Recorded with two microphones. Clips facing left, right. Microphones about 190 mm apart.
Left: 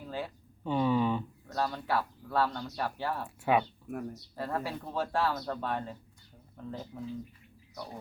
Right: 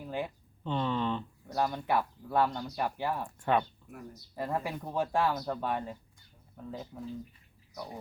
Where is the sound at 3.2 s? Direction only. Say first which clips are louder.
Left 2 dB; 5° left (ahead or behind).